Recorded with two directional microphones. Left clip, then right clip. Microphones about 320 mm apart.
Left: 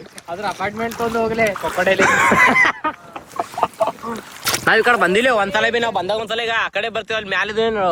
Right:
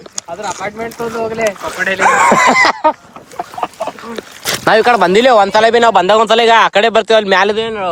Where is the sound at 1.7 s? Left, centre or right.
Centre.